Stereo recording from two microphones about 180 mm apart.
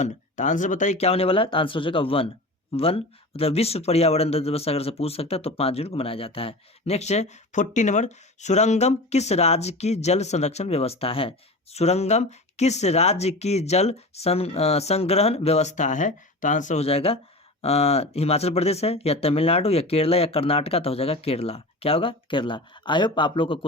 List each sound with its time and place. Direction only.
0.0 s speech: 45° left (ahead or behind)